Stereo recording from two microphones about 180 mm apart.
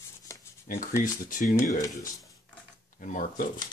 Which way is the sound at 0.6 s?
50° left (ahead or behind).